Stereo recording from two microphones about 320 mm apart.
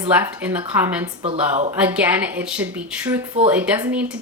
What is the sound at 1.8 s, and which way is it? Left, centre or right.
A woman's voice, centre.